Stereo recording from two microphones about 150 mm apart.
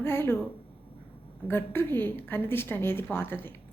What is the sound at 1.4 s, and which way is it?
A woman's voice, 15° left (ahead or behind).